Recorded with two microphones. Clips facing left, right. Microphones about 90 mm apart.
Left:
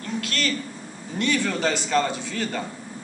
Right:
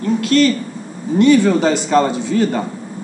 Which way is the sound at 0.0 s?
25° right (ahead or behind).